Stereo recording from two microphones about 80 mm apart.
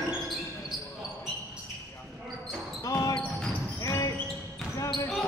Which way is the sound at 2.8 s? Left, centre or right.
Left.